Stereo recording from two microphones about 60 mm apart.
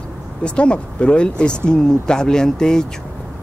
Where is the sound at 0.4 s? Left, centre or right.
Centre.